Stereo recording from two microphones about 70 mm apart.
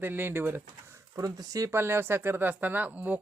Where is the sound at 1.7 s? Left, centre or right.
Right.